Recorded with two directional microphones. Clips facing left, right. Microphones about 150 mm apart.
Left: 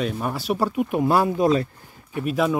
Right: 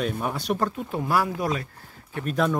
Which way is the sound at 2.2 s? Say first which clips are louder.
Left 2 dB; 5° left (ahead or behind).